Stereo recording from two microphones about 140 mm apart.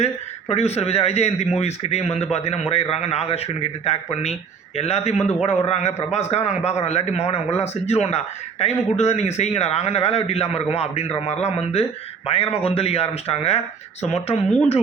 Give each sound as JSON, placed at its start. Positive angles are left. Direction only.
{"t": 0.0, "sound": "a man's voice", "side_deg": 50}